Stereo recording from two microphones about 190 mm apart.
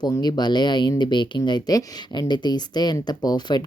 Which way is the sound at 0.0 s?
20° left (ahead or behind).